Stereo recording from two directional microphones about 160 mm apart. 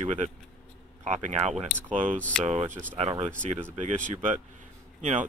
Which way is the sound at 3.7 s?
50° right (ahead or behind).